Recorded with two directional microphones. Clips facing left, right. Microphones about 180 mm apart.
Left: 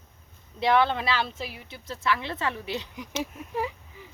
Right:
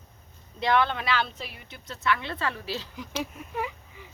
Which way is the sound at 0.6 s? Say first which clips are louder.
Left 2 dB; 25° left (ahead or behind).